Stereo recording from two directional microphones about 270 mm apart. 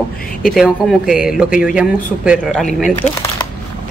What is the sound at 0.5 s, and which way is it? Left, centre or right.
A woman's voice, centre.